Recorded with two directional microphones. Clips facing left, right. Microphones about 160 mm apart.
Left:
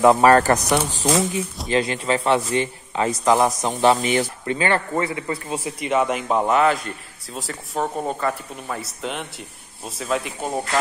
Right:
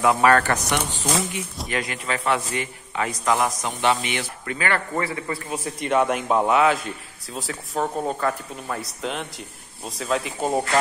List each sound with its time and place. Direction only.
0.0 s a man's voice: 30° left (ahead or behind)
5.6 s speech: centre (ahead or behind)